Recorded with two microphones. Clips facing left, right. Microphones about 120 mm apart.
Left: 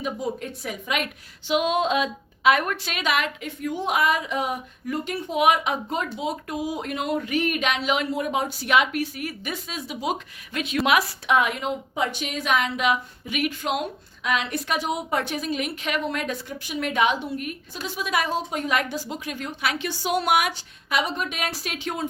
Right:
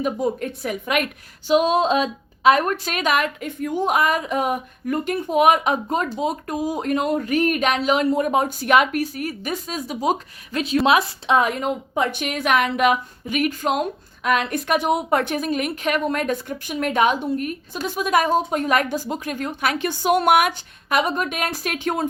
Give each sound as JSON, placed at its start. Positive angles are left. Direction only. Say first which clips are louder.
{"t": 0.0, "sound": "a woman's voice", "louder": "right 6 dB", "side_deg": -55}
{"t": 1.5, "sound": "a woman's voice", "louder": "right 5 dB", "side_deg": -35}